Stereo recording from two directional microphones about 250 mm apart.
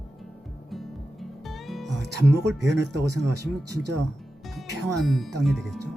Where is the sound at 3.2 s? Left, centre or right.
Right.